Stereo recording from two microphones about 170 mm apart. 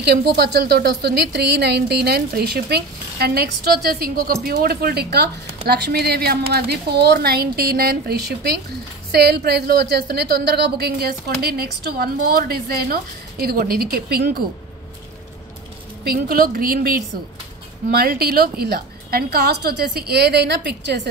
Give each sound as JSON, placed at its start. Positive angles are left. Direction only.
{"t": 0.0, "sound": "a woman's voice", "side_deg": -75}
{"t": 16.0, "sound": "a woman's voice", "side_deg": -60}